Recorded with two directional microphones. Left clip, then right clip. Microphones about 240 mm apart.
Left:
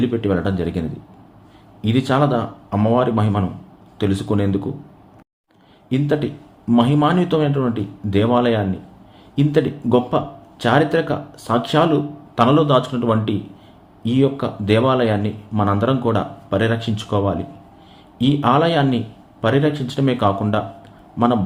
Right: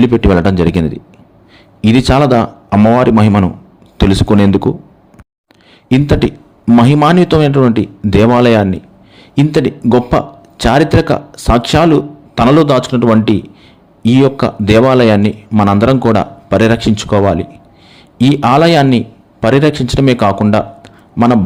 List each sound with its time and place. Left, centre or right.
0.0 s a man's voice: right
5.9 s a man's voice: right